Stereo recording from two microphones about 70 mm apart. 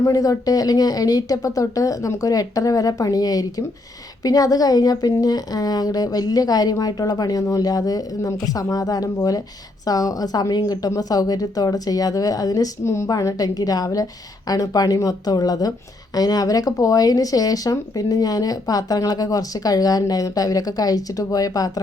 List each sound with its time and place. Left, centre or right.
0.0 s speech: left
12.8 s a woman's voice: left
13.1 s speech: left